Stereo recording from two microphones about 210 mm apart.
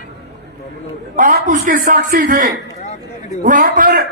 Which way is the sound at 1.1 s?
40° right (ahead or behind).